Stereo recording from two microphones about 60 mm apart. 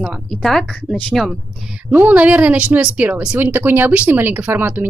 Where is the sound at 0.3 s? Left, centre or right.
Centre.